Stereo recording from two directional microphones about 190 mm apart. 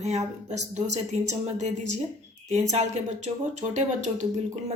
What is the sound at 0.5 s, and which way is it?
Speech, 35° right (ahead or behind).